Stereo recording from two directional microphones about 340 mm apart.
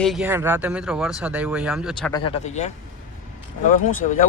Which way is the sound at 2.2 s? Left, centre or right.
Centre.